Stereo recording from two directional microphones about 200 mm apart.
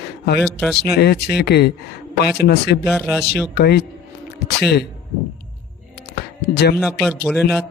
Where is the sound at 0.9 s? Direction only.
55° left (ahead or behind).